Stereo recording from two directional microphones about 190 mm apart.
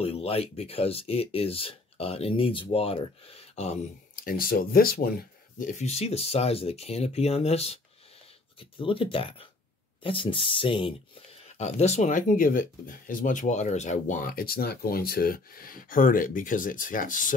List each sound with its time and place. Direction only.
0.0 s speech: 30° left (ahead or behind)
4.2 s speech: 50° left (ahead or behind)
5.6 s speech: 35° left (ahead or behind)